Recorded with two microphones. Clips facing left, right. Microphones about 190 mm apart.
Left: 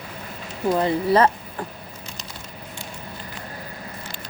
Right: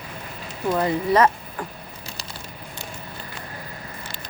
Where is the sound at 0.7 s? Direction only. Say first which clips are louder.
Left 1 dB; 30° left (ahead or behind).